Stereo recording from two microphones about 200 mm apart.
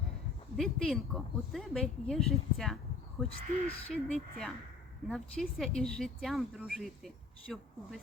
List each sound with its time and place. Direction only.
0.5 s speech: centre (ahead or behind)
3.2 s speech: 30° left (ahead or behind)
3.9 s speech: 5° left (ahead or behind)